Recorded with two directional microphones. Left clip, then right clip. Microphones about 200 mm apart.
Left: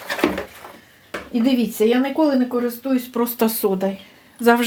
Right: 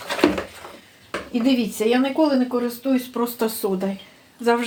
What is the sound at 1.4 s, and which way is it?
Speech, 40° left (ahead or behind).